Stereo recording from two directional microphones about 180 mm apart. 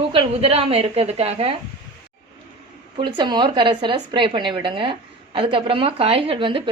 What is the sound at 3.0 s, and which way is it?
Speech, 25° right (ahead or behind).